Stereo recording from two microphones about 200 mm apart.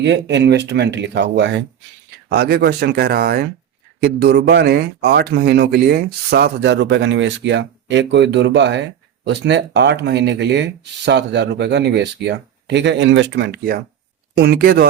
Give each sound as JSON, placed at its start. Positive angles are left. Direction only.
{"t": 0.0, "sound": "speech", "side_deg": -60}